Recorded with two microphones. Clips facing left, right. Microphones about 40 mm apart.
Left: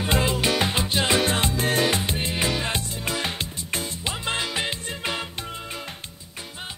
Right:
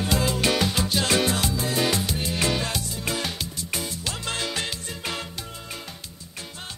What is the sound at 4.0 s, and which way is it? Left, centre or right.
Music, left.